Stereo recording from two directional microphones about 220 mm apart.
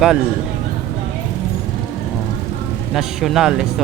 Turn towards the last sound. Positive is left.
turn(degrees=0)  # may be behind; listen again after turning